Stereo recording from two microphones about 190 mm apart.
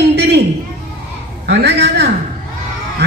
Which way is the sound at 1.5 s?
65° right (ahead or behind).